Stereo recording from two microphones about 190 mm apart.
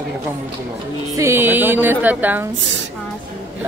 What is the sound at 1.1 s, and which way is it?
Speech, 15° right (ahead or behind).